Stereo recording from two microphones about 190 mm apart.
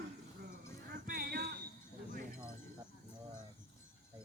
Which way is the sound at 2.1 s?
50° right (ahead or behind).